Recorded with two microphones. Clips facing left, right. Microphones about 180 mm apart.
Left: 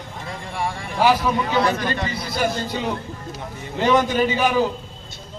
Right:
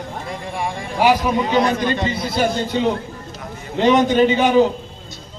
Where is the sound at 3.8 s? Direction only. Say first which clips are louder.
Right 4 dB; 20° right (ahead or behind).